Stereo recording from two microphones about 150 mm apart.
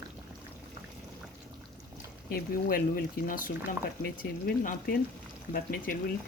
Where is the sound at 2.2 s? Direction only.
75° left (ahead or behind).